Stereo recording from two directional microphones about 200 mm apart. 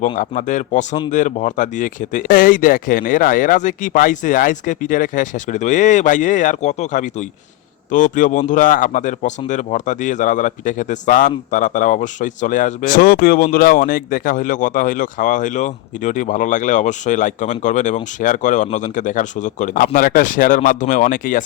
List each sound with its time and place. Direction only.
0.2 s speech: 40° left (ahead or behind)